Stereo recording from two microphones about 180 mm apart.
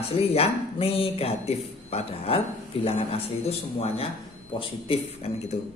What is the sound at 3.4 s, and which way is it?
Speech, 35° left (ahead or behind).